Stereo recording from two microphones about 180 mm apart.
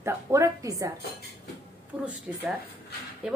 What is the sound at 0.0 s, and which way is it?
Speech, 15° right (ahead or behind).